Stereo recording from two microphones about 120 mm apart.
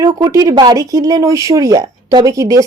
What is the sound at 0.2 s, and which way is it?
Speech, 30° right (ahead or behind).